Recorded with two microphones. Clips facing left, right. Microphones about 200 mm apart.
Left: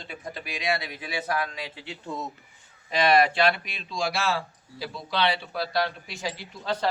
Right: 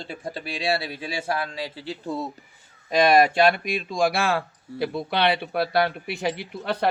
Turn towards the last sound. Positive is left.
turn(degrees=-60)  # may be behind; listen again after turning